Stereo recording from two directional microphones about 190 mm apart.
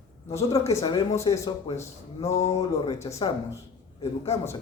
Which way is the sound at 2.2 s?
35° left (ahead or behind).